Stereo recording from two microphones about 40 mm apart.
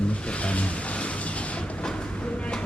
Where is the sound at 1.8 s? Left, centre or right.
Left.